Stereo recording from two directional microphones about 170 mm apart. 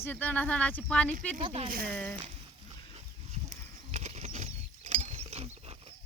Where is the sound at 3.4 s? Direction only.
40° right (ahead or behind).